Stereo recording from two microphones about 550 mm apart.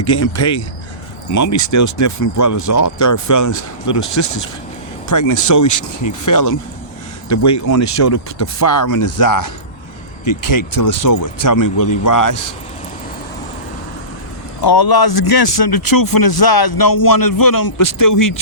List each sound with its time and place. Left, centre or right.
0.0 s speech: left
14.6 s speech: left